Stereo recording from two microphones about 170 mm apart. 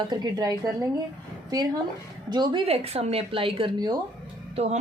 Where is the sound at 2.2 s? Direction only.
25° right (ahead or behind).